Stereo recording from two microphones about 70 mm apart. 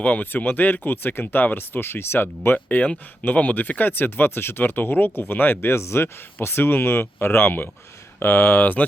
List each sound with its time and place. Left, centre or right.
0.0 s speech: left